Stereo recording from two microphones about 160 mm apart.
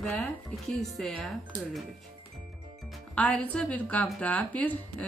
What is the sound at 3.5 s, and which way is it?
A woman's voice, 10° left (ahead or behind).